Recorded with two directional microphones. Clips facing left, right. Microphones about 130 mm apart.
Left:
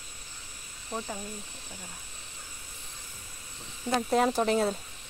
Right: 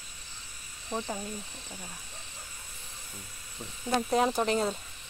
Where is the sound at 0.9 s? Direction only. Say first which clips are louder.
Right 2 dB; 25° right (ahead or behind).